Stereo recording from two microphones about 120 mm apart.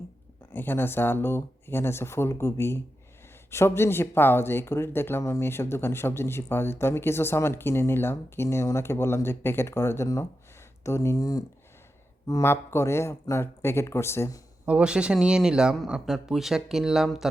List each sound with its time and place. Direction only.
0.5 s speech: 15° left (ahead or behind)
14.7 s speech: 10° right (ahead or behind)